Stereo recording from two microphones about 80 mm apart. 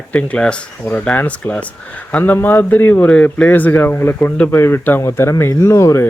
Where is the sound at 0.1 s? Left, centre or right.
Centre.